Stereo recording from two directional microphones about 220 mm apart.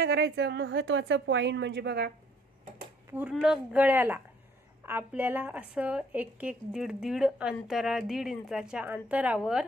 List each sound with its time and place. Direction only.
0.0 s a woman's voice: 50° right (ahead or behind)
3.1 s speech: 5° right (ahead or behind)